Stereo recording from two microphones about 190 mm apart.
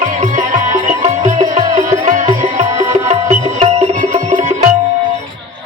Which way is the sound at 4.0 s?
40° right (ahead or behind).